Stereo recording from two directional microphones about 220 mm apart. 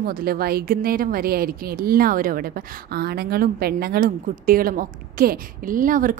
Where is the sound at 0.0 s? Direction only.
45° right (ahead or behind).